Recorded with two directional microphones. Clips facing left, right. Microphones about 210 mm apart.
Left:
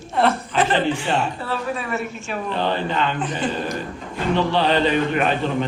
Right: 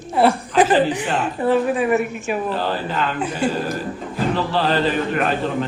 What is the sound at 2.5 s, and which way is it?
A man's voice, 5° right (ahead or behind).